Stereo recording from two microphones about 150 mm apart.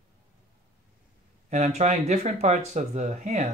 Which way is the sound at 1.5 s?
50° right (ahead or behind).